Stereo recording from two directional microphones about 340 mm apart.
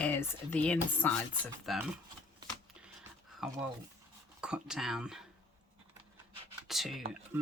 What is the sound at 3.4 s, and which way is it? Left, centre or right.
Speech, centre.